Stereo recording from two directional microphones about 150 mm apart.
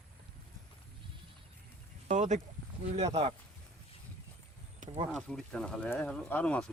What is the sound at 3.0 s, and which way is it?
Speech, 45° right (ahead or behind).